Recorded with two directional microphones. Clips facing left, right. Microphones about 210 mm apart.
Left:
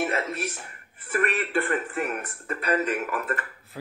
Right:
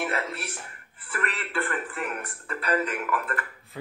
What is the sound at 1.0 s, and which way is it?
Speech, 20° left (ahead or behind).